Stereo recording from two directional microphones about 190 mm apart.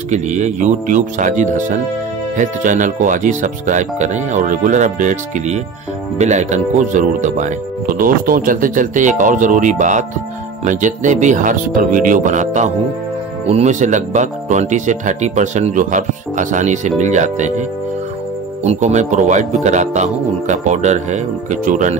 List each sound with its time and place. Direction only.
0.1 s speech: 40° right (ahead or behind)